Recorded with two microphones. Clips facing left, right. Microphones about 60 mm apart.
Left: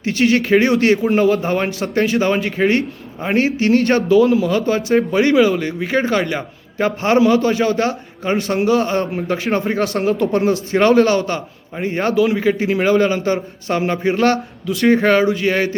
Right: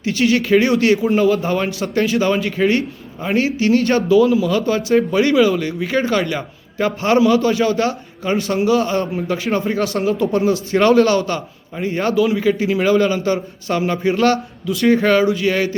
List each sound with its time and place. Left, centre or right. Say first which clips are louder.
0.0 s a man's voice: left 1 dB; left
4.4 s a man's voice: even; left
10.7 s a man's voice: even; left